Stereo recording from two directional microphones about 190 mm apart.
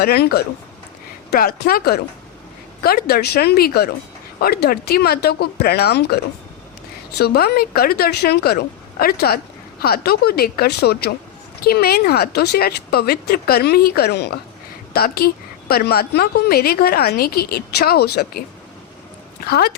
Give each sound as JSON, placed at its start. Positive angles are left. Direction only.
{"t": 0.0, "sound": "a woman's voice", "side_deg": 55}
{"t": 7.2, "sound": "a woman's voice", "side_deg": 55}
{"t": 19.5, "sound": "a woman's voice", "side_deg": 55}